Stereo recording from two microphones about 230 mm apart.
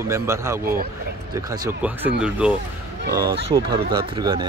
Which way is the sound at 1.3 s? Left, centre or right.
Centre.